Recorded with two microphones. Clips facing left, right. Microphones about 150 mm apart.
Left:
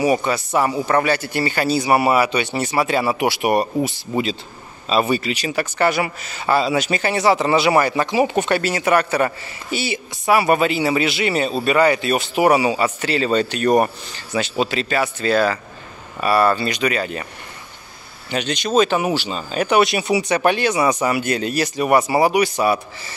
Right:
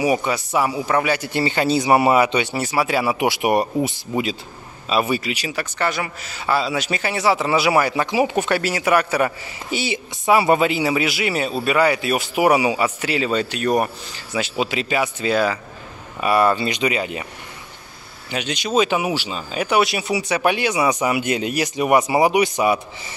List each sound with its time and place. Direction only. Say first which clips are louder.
0.0 s speech: left 1 dB; 10° right (ahead or behind)
2.5 s speech: left 1 dB; 5° right (ahead or behind)
3.2 s speech: even; 20° right (ahead or behind)
18.3 s speech: left 2 dB; 10° right (ahead or behind)